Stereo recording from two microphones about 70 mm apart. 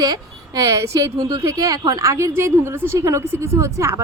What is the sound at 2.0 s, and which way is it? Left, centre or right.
A woman's voice, right.